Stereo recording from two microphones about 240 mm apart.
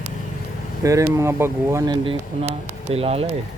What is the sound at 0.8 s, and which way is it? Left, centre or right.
Speech, centre.